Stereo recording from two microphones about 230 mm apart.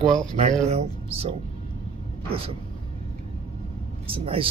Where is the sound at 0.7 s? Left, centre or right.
Right.